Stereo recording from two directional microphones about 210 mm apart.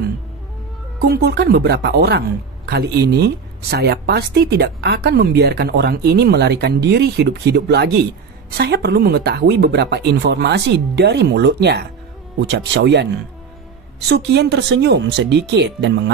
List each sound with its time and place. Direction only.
1.0 s speech: 50° right (ahead or behind)